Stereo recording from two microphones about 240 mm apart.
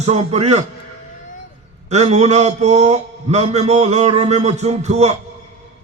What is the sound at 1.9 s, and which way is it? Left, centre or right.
A man's voice, right.